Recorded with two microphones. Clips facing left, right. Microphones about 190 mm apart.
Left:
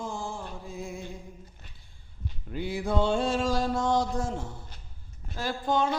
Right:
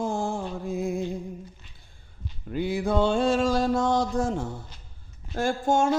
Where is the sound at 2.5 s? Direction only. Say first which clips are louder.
Right 6 dB; 55° right (ahead or behind).